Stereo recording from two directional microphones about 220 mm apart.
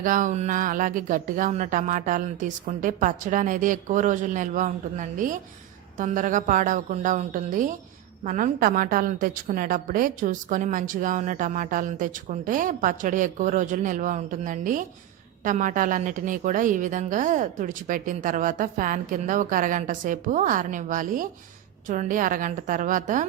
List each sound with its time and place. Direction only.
0.0 s a woman's voice: 35° right (ahead or behind)